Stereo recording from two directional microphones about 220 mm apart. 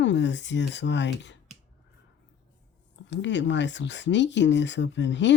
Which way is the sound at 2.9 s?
55° left (ahead or behind).